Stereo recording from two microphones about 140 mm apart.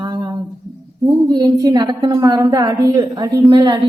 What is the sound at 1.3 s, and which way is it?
A woman's voice, 25° right (ahead or behind).